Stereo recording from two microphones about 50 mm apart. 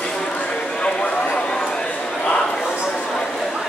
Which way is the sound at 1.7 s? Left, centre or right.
Centre.